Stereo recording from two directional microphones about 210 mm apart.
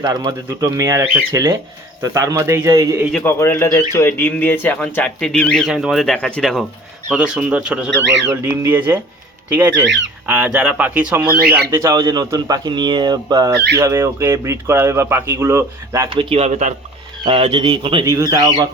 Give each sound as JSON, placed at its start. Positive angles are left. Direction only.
{"t": 0.0, "sound": "speech", "side_deg": -15}
{"t": 3.1, "sound": "speech", "side_deg": 10}
{"t": 9.8, "sound": "speech", "side_deg": -60}
{"t": 10.2, "sound": "speech", "side_deg": -5}